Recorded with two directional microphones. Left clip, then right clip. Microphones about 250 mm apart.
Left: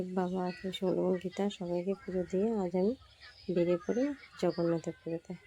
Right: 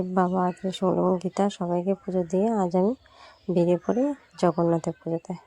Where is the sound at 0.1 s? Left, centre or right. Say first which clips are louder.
Right 14 dB; right.